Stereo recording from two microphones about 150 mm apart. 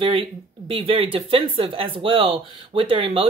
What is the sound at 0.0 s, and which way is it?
Speech, 40° right (ahead or behind).